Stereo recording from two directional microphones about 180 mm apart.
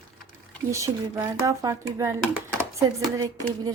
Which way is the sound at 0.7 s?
15° right (ahead or behind).